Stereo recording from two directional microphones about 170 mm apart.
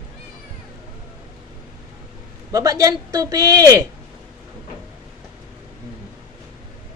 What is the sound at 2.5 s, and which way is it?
Speech, 20° right (ahead or behind).